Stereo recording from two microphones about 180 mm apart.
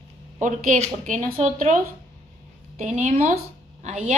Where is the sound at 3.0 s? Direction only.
40° right (ahead or behind).